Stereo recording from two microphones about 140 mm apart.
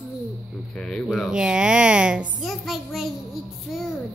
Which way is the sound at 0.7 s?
5° left (ahead or behind).